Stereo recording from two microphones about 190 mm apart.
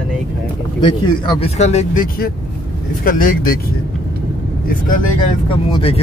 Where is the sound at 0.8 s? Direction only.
25° left (ahead or behind); by 3.6 s 45° left (ahead or behind).